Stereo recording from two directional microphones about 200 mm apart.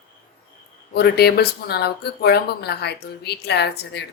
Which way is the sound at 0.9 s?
50° left (ahead or behind).